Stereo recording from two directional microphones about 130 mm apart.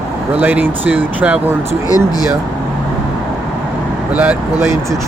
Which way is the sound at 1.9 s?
30° left (ahead or behind).